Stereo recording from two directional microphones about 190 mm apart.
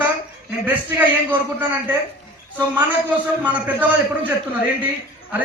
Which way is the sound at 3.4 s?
10° right (ahead or behind).